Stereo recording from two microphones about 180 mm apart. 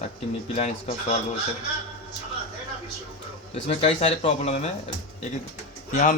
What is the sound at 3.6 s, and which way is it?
Speech, 35° left (ahead or behind).